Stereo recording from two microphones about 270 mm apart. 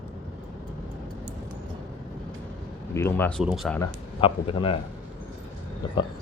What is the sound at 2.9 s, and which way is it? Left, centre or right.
Speech, centre.